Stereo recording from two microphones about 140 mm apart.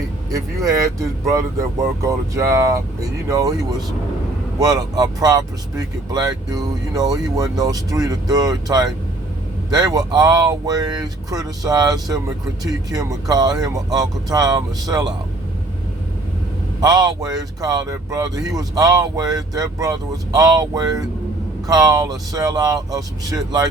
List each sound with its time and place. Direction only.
0.3 s speech: 25° right (ahead or behind)
4.6 s speech: 25° right (ahead or behind)
16.8 s speech: 25° right (ahead or behind)